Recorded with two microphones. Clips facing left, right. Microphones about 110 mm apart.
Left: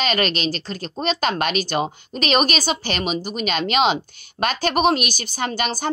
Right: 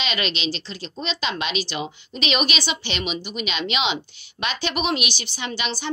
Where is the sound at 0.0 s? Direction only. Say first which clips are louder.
Left 5 dB; 45° left (ahead or behind).